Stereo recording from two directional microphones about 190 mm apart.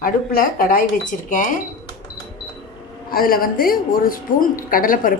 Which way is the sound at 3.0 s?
50° left (ahead or behind).